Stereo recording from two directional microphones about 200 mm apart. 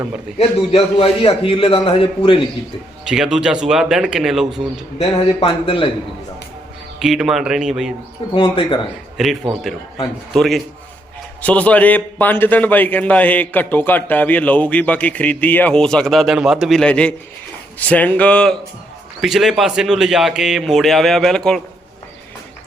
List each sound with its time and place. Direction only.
0.3 s a man's voice: 30° left (ahead or behind)
3.0 s a man's voice: 5° right (ahead or behind)
4.9 s a man's voice: 30° left (ahead or behind)
7.0 s a man's voice: centre (ahead or behind)
8.4 s a man's voice: 25° left (ahead or behind)
9.1 s a man's voice: centre (ahead or behind)